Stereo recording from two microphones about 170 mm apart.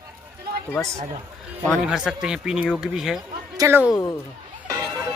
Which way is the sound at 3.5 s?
15° right (ahead or behind).